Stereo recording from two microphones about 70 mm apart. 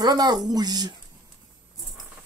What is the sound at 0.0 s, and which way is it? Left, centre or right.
Speech, right.